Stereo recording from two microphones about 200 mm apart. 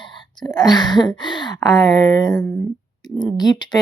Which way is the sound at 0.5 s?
20° left (ahead or behind).